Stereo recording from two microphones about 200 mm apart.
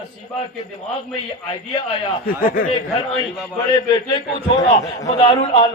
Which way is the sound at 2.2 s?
45° left (ahead or behind).